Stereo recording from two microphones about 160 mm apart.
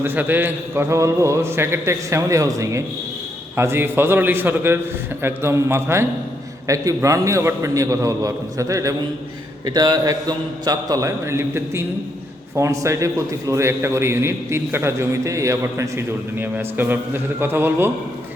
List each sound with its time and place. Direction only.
0.0 s a man's voice: 10° right (ahead or behind)